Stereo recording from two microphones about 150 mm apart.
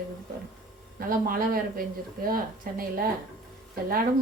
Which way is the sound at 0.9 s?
75° right (ahead or behind).